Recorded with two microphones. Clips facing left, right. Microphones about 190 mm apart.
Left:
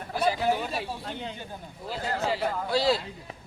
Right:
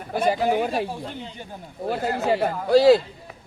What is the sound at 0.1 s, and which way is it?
Speech, 55° right (ahead or behind).